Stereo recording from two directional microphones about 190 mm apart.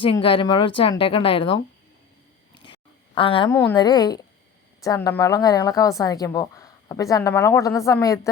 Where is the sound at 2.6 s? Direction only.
25° left (ahead or behind).